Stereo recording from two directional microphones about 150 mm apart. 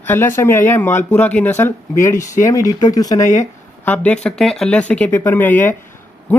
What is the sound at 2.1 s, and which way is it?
Speech, 55° left (ahead or behind).